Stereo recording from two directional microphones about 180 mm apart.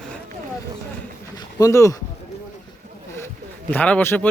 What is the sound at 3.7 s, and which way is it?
Speech, 10° left (ahead or behind).